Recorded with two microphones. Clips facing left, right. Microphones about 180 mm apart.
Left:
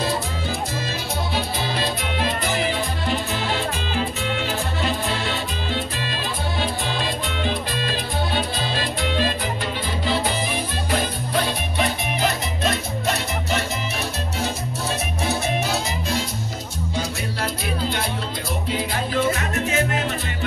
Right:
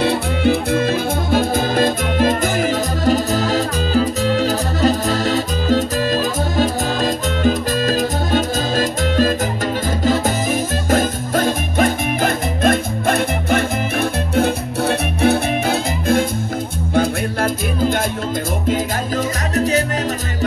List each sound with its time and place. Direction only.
0.0 s music: 65° right (ahead or behind)
14.3 s salsa music: 60° right (ahead or behind)
16.9 s music: 50° right (ahead or behind)